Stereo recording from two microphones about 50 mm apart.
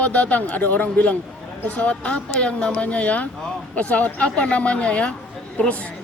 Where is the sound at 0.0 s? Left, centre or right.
Left.